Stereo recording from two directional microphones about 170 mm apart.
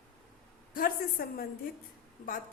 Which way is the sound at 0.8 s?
60° left (ahead or behind).